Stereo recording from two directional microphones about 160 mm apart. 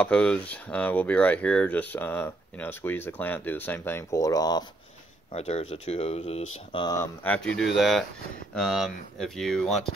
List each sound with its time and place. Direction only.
0.0 s speech: 5° left (ahead or behind); by 4.6 s 25° left (ahead or behind)
5.3 s speech: 40° left (ahead or behind)
6.8 s speech: 25° left (ahead or behind)
7.2 s speech: 5° left (ahead or behind)